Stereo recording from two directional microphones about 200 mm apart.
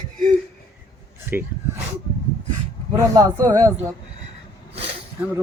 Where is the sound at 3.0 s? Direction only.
15° right (ahead or behind).